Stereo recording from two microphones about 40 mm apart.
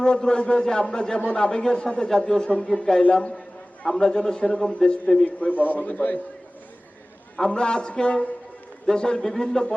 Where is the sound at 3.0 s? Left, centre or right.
Left.